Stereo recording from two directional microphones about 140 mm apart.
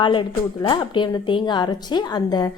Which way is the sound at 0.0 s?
35° left (ahead or behind).